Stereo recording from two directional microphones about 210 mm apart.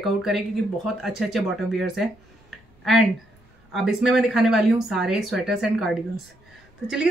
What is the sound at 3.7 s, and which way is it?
Speech, centre (ahead or behind).